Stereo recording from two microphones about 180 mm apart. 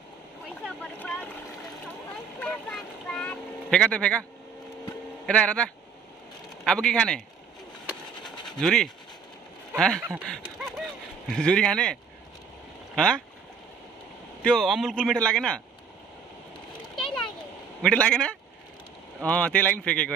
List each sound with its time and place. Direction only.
0.7 s boat: 10° left (ahead or behind)
2.4 s boat: 5° left (ahead or behind)
5.2 s speech: 5° left (ahead or behind)
8.5 s speech: 5° left (ahead or behind)
10.2 s a sound: 5° left (ahead or behind)
11.2 s speech: 5° left (ahead or behind)
14.4 s speech: centre (ahead or behind)
16.9 s a sound: centre (ahead or behind)
17.8 s speech: 5° left (ahead or behind)